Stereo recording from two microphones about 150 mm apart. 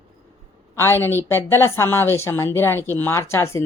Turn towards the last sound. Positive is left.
turn(degrees=15)  # may be behind; listen again after turning